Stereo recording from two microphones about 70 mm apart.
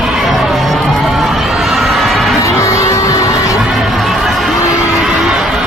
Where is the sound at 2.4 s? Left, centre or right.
Left.